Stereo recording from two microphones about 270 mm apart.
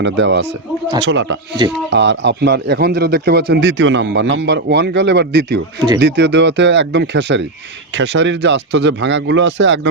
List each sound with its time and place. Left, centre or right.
0.0 s speech: right